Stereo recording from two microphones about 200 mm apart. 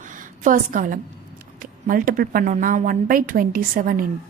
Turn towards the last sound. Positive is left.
turn(degrees=-45)  # may be behind; listen again after turning